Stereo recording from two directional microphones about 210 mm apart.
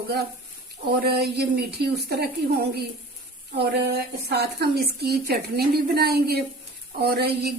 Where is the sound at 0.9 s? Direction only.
50° right (ahead or behind).